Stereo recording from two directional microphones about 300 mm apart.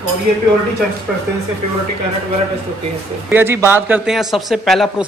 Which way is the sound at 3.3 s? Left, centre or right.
Centre.